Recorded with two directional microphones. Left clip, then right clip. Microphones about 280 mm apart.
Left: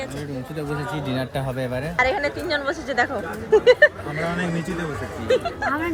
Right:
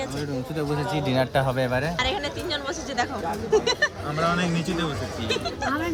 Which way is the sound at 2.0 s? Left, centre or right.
Centre.